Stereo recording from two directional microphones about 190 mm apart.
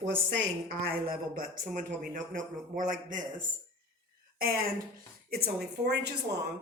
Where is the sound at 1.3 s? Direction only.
45° right (ahead or behind).